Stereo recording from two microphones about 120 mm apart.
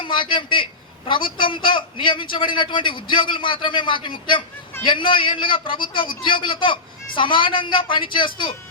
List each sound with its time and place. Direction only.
0.0 s a man's voice: 40° left (ahead or behind)